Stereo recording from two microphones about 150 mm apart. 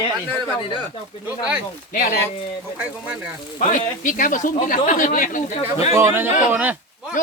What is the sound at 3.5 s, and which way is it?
Speech, 60° left (ahead or behind).